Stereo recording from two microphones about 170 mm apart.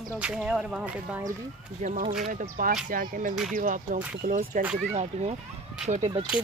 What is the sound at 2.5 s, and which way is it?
Speech, 55° right (ahead or behind).